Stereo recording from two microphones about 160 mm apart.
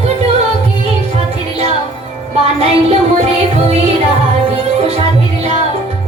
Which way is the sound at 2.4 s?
40° right (ahead or behind).